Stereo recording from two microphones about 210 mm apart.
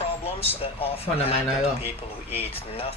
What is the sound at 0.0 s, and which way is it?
Speech, 25° left (ahead or behind).